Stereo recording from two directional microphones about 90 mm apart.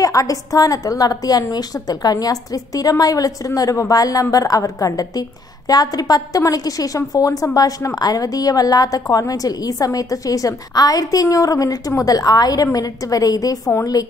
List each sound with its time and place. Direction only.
0.0 s a woman's voice: 40° left (ahead or behind)